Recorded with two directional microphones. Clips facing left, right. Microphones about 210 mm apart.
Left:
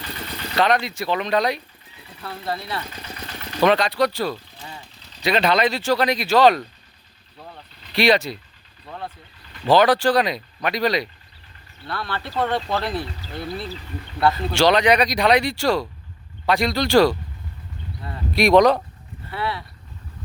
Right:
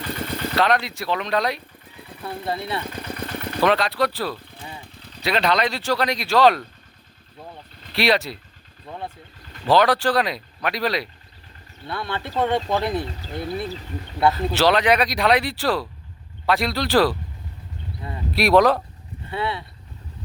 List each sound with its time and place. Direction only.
0.0 s vehicle: 50° right (ahead or behind)
0.5 s speech: centre (ahead or behind)
2.8 s vehicle: 55° right (ahead or behind)
3.6 s speech: centre (ahead or behind)
4.4 s a sound: 55° right (ahead or behind)
5.2 s speech: centre (ahead or behind)
7.9 s speech: centre (ahead or behind)
9.4 s vehicle: 45° right (ahead or behind)
9.6 s speech: centre (ahead or behind)
11.9 s speech: 20° right (ahead or behind)
14.3 s speech: 5° right (ahead or behind)
18.3 s speech: 5° right (ahead or behind)
19.3 s speech: 20° right (ahead or behind)